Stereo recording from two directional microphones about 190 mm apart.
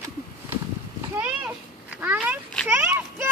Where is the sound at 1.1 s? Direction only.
5° right (ahead or behind).